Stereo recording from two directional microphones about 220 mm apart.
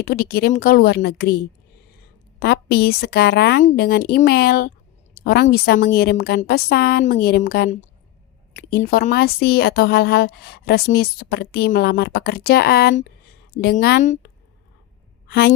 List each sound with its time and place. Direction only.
0.0 s speech: 45° left (ahead or behind)
2.4 s speech: 45° left (ahead or behind)
15.3 s a woman's voice: 45° left (ahead or behind)